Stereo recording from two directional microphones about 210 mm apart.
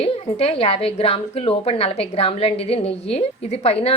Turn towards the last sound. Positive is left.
turn(degrees=30)  # may be behind; listen again after turning